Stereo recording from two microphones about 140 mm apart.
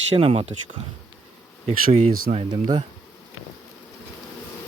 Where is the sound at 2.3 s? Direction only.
45° right (ahead or behind).